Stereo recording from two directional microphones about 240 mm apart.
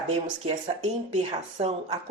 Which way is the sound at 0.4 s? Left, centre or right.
Right.